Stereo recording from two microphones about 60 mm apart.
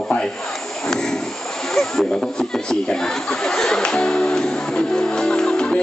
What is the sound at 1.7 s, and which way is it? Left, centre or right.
Snicker, centre.